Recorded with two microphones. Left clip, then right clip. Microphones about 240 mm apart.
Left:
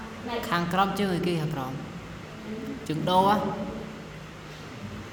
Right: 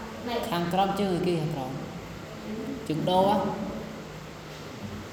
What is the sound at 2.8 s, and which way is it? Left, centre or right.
Speech, left.